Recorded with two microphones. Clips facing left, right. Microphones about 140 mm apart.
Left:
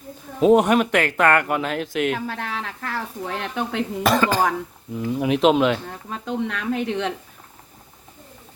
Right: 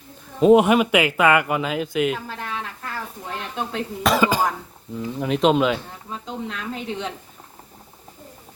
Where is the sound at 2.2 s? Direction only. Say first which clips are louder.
Left 2 dB; 75° left (ahead or behind).